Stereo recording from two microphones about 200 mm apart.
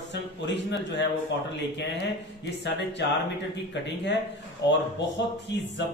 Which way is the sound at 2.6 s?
60° left (ahead or behind).